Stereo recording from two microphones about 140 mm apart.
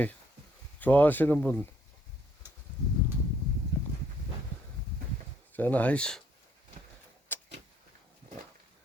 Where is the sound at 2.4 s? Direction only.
15° right (ahead or behind).